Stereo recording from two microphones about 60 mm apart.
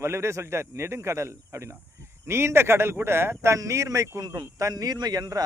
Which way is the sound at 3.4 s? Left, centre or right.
Right.